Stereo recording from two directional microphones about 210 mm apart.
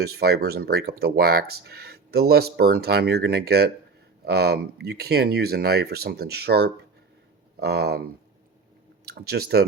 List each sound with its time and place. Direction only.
0.0 s speech: 50° right (ahead or behind)